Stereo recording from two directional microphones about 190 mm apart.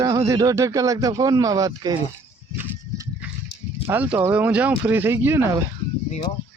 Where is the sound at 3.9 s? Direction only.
10° right (ahead or behind).